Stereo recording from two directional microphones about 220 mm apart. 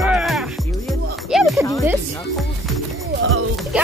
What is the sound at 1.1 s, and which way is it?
Speech, centre (ahead or behind).